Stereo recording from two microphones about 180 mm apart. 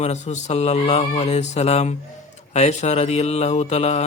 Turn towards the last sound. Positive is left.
turn(degrees=35)  # may be behind; listen again after turning